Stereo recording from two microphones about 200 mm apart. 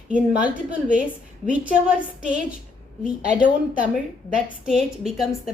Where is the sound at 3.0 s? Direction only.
35° right (ahead or behind).